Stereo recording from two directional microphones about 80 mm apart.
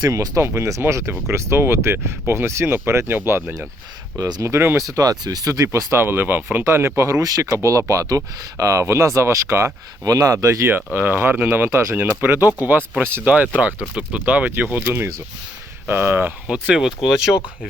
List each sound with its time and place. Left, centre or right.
0.0 s speech: right
0.4 s speech: right
4.2 s speech: right
4.8 s speech: right
5.6 s speech: right
10.0 s speech: right
10.9 s speech: right
13.2 s speech: centre
16.5 s speech: centre
17.3 s speech: left